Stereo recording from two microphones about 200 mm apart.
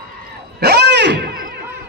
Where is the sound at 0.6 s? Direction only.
55° right (ahead or behind).